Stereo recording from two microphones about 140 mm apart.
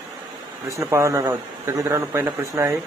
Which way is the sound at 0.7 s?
20° right (ahead or behind).